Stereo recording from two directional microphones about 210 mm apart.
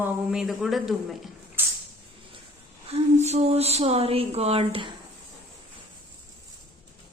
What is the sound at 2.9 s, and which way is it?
Speech, 30° right (ahead or behind).